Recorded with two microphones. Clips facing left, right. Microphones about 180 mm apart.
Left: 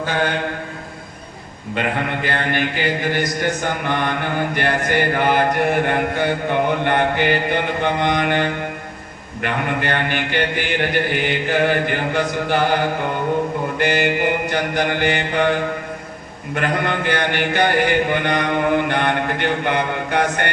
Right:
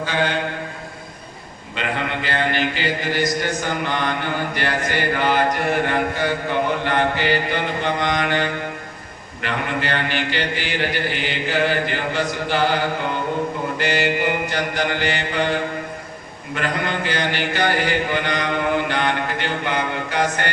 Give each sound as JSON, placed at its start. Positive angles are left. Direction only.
{"t": 1.7, "sound": "a man's voice", "side_deg": 50}
{"t": 13.7, "sound": "mantra", "side_deg": 55}
{"t": 16.6, "sound": "a man's voice", "side_deg": 55}